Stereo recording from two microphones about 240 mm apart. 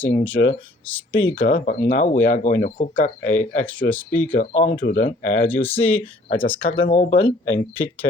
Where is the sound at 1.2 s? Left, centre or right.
Left.